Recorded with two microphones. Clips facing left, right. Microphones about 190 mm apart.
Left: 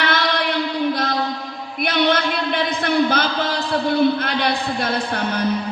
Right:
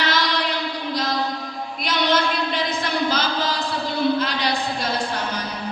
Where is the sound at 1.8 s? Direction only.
55° left (ahead or behind).